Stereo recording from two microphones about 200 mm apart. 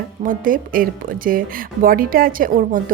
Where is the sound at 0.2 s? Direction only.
45° right (ahead or behind).